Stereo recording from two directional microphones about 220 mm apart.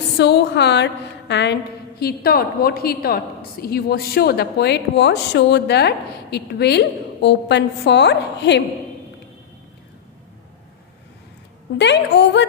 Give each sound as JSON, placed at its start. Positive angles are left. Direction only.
{"t": 0.2, "sound": "a woman's voice", "side_deg": 50}
{"t": 11.8, "sound": "a woman's voice", "side_deg": 50}